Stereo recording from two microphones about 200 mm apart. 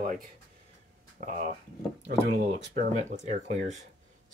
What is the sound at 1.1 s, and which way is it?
Speech, 45° right (ahead or behind).